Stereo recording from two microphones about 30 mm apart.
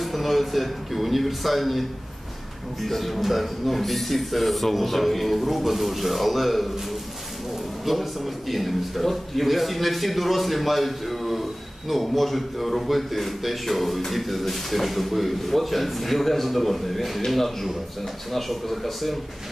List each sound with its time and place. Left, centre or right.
0.0 s a man's voice: centre